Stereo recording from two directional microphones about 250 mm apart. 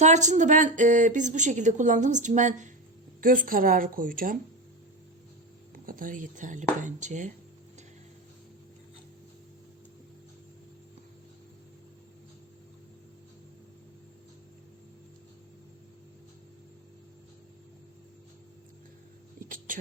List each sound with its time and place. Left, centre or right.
0.0 s speech: right
5.7 s speech: right
19.5 s a sound: right